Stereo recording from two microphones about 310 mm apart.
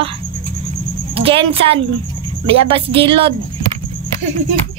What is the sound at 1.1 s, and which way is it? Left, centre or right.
Speech, centre.